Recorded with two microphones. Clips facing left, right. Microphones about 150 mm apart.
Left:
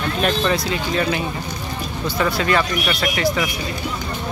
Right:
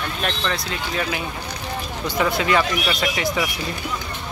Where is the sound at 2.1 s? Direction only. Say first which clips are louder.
Even; 20° right (ahead or behind).